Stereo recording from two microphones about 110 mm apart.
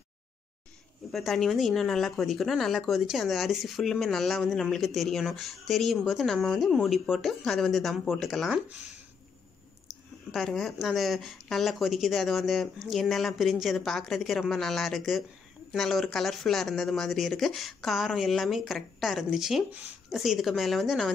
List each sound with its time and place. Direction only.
1.1 s speech: centre (ahead or behind)
10.3 s speech: centre (ahead or behind)